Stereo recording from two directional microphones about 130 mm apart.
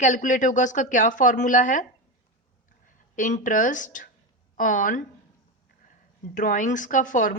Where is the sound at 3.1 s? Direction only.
75° left (ahead or behind).